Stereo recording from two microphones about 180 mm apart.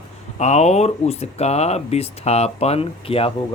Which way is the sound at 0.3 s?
40° left (ahead or behind).